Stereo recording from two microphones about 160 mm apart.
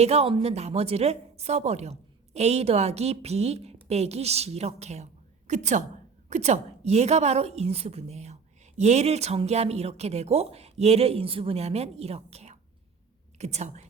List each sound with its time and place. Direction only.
0.0 s a woman's voice: 40° right (ahead or behind)